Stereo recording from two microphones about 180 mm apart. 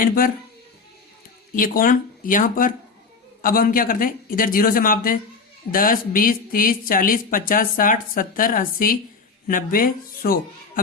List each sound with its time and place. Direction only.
1.5 s a woman's voice: 50° left (ahead or behind)